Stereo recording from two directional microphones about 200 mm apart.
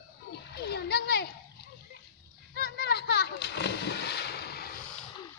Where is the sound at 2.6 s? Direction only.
55° left (ahead or behind).